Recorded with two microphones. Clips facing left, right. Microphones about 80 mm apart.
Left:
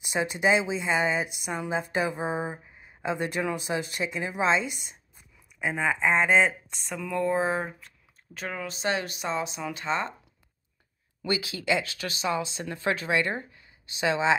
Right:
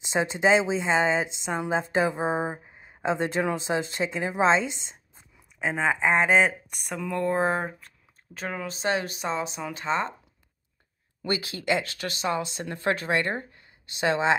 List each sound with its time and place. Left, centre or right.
0.0 s a woman's voice: right
8.6 s speech: right
11.2 s speech: right
13.5 s a sound: right